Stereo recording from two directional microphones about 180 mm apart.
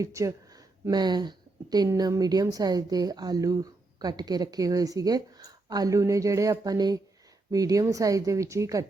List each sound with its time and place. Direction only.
0.0 s a woman's voice: 15° right (ahead or behind)